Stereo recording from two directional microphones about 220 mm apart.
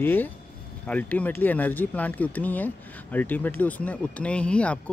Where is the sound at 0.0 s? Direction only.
10° left (ahead or behind).